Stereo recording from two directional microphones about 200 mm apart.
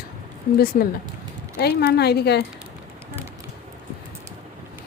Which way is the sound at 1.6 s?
50° left (ahead or behind).